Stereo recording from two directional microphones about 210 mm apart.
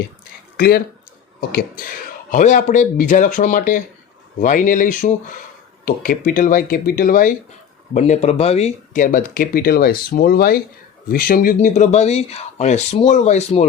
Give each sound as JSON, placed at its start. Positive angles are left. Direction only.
{"t": 0.5, "sound": "speech", "side_deg": 45}